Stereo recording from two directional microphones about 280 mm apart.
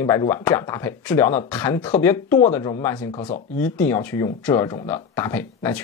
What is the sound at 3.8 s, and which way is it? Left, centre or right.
Speech, centre.